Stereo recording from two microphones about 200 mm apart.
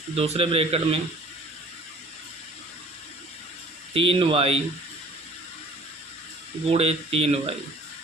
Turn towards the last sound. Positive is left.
turn(degrees=-30)  # may be behind; listen again after turning